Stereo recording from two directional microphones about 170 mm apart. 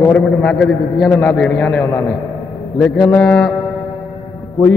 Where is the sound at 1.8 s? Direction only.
15° left (ahead or behind).